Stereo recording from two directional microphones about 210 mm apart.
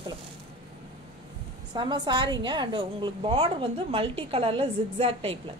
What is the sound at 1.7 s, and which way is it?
A woman's voice, 20° right (ahead or behind).